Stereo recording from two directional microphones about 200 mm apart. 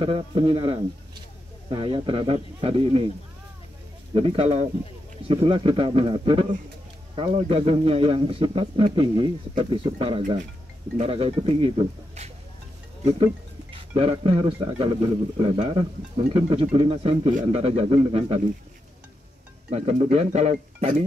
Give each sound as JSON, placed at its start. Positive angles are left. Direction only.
{"t": 0.0, "sound": "a man's voice", "side_deg": -25}
{"t": 4.1, "sound": "a man's voice", "side_deg": -30}
{"t": 13.7, "sound": "a man's voice", "side_deg": -25}
{"t": 19.7, "sound": "speech", "side_deg": -30}